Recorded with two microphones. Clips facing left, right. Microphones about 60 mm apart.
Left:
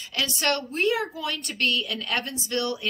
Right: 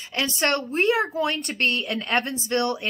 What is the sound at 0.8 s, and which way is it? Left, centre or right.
Speech, right.